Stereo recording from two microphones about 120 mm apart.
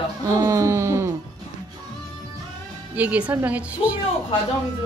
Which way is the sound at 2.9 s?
10° right (ahead or behind).